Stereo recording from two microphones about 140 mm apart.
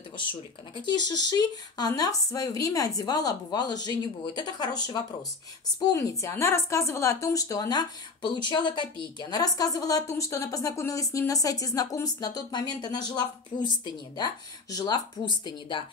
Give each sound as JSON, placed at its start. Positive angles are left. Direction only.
{"t": 0.3, "sound": "a woman's voice", "side_deg": 35}